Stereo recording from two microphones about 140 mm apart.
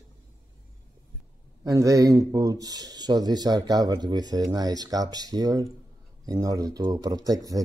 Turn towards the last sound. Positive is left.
turn(degrees=-25)  # may be behind; listen again after turning